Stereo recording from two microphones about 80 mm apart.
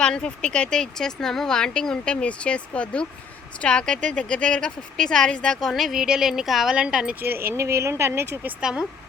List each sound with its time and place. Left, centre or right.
0.0 s speech: centre
7.2 s speech: right
8.6 s speech: centre